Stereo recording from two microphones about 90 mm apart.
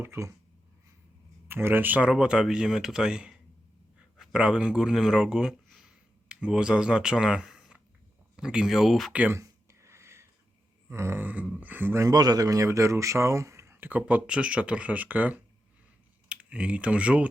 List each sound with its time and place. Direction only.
0.0 s speech: 30° right (ahead or behind)
1.5 s speech: 25° right (ahead or behind); by 9.1 s centre (ahead or behind)
9.3 s a sound: 30° right (ahead or behind)
10.8 s grunt: 30° right (ahead or behind)
11.6 s speech: 20° right (ahead or behind)
12.0 s speech: 45° right (ahead or behind); by 17.2 s 15° right (ahead or behind)